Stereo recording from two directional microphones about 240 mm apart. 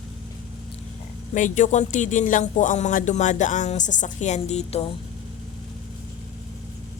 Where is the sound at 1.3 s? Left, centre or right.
Left.